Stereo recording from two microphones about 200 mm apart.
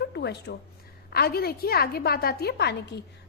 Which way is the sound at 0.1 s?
55° left (ahead or behind).